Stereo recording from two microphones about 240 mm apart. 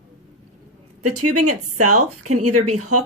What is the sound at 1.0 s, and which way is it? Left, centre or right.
Speech, right.